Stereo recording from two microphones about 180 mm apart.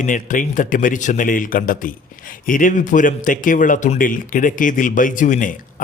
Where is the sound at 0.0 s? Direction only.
45° left (ahead or behind).